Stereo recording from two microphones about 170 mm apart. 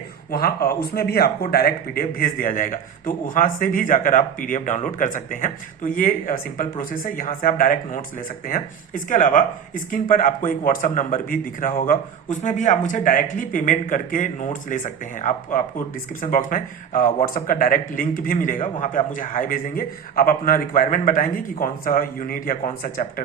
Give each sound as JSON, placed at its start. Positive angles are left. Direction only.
{"t": 0.3, "sound": "speech", "side_deg": 60}